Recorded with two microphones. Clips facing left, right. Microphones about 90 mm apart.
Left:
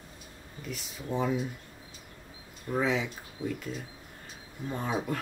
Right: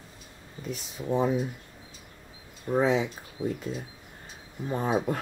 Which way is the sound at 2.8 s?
30° right (ahead or behind).